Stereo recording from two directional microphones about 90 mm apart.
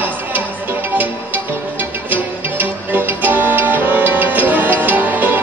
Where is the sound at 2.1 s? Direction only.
20° right (ahead or behind).